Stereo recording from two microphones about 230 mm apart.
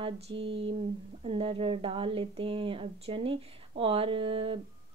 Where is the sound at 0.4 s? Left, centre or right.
Right.